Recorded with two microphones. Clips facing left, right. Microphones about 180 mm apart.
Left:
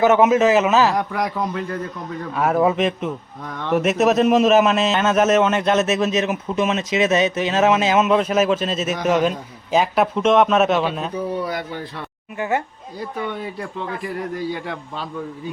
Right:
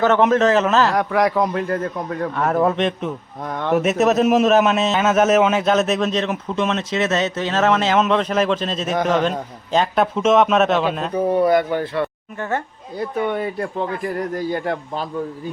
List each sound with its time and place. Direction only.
0.0 s a man's voice: 10° left (ahead or behind)
0.9 s a man's voice: 80° right
1.5 s speech: 55° right (ahead or behind)
2.3 s a man's voice: 5° left (ahead or behind)
3.4 s speech: 50° right (ahead or behind)
3.8 s a man's voice: centre (ahead or behind)
11.1 s speech: 55° right (ahead or behind)
12.4 s a man's voice: 10° left (ahead or behind)
13.0 s speech: 60° right (ahead or behind)